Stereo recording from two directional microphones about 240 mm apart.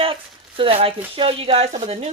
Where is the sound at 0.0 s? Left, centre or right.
Right.